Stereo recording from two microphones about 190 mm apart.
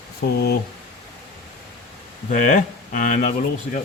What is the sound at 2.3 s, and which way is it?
Speech, 45° left (ahead or behind).